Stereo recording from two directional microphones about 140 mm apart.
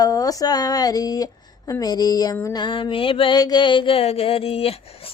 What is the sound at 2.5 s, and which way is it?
Speech, 35° left (ahead or behind).